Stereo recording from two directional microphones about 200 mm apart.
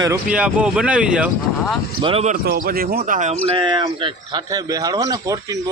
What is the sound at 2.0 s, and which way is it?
Speech, 30° right (ahead or behind).